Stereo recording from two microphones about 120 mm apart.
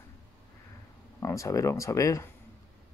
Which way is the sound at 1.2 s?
25° left (ahead or behind).